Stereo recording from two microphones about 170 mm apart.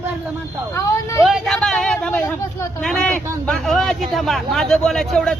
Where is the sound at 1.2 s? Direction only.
Centre (ahead or behind).